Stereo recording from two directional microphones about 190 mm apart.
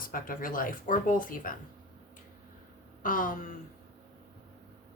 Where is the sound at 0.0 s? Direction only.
45° left (ahead or behind).